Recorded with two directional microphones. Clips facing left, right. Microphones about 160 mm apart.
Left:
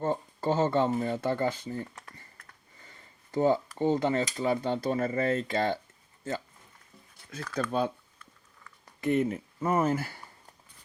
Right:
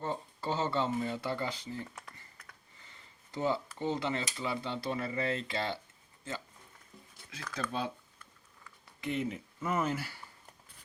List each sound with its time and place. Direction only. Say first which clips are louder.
0.0 s speech: left 7 dB; 50° left (ahead or behind)
3.3 s speech: left 8 dB; 45° left (ahead or behind)
7.5 s speech: left 7 dB; 50° left (ahead or behind)
9.0 s speech: left 8 dB; 50° left (ahead or behind)
9.6 s speech: left 6 dB; 40° left (ahead or behind)